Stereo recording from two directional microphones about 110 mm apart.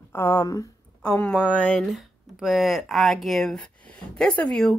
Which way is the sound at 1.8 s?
Centre (ahead or behind).